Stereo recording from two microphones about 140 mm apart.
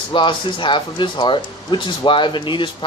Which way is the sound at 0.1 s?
35° left (ahead or behind).